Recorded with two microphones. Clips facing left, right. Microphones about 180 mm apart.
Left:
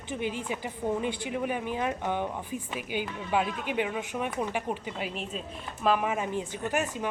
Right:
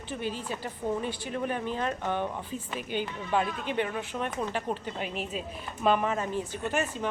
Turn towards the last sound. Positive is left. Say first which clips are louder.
# even
turn(degrees=10)  # may be behind; listen again after turning